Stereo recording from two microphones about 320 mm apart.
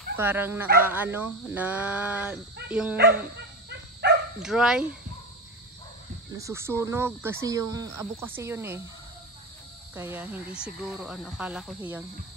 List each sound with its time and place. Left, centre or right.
0.2 s speech: centre
4.0 s dog: right
4.4 s speech: centre
6.3 s speech: centre
9.9 s speech: centre